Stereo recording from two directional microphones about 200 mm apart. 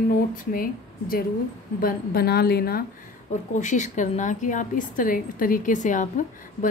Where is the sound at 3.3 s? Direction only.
40° left (ahead or behind).